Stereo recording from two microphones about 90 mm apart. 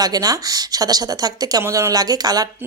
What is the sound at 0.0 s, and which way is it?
Speech, 45° right (ahead or behind).